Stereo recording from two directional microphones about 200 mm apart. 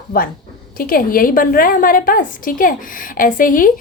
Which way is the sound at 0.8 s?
45° left (ahead or behind).